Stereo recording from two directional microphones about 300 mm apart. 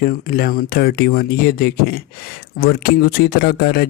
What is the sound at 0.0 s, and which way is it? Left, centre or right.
Speech, left.